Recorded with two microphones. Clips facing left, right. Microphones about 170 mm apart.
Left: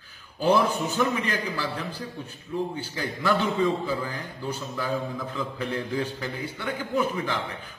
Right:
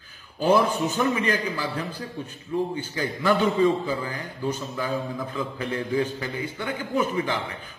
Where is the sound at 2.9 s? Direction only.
5° right (ahead or behind).